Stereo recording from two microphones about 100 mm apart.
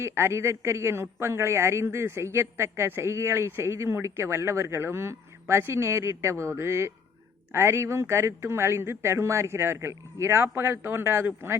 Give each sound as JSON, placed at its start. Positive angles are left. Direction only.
{"t": 0.0, "sound": "a man's voice", "side_deg": -25}